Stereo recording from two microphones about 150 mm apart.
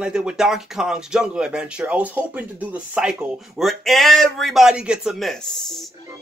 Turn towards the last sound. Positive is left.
turn(degrees=0)  # may be behind; listen again after turning